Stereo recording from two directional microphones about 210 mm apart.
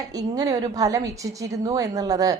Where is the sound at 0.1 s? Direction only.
15° right (ahead or behind).